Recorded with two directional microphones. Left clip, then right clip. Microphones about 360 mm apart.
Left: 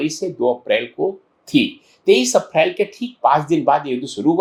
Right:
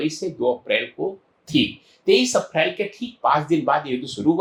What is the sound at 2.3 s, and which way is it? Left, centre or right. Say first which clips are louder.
Speech: left 5 dB; left.